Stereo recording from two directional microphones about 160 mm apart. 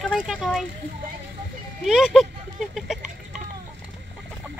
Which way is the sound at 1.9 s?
5° right (ahead or behind).